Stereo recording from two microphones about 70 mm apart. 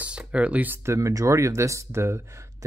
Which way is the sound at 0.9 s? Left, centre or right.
Right.